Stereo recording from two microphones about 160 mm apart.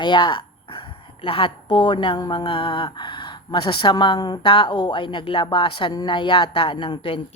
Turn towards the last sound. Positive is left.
turn(degrees=35)  # may be behind; listen again after turning